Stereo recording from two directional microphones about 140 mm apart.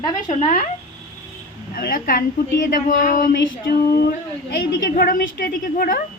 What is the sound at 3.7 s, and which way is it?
A woman's voice, 90° left.